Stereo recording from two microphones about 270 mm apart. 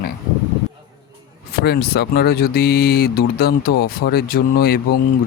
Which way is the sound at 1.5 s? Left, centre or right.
Left.